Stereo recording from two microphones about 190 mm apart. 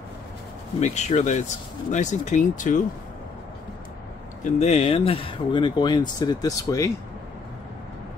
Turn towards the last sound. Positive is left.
turn(degrees=15)  # may be behind; listen again after turning